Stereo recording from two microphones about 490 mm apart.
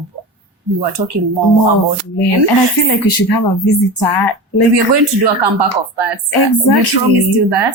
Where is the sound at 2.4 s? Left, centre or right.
Left.